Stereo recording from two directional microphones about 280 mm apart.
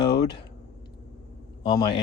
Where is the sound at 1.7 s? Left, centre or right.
Centre.